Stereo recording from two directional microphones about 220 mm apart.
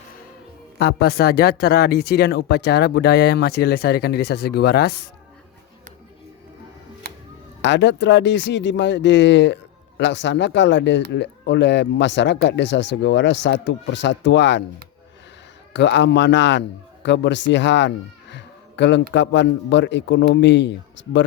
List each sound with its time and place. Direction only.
0.8 s speech: 45° left (ahead or behind)
7.1 s music: 45° right (ahead or behind)
7.6 s speech: 55° left (ahead or behind)
15.7 s a man's voice: 55° left (ahead or behind)